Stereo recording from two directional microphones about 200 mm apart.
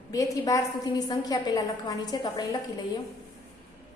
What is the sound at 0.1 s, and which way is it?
A woman's voice, 15° left (ahead or behind).